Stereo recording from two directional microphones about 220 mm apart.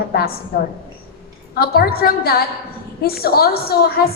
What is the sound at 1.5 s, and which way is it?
A woman's voice, 45° left (ahead or behind).